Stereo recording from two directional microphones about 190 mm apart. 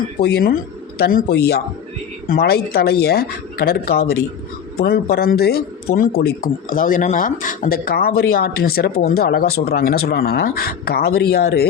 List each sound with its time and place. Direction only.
0.2 s speech: 55° left (ahead or behind)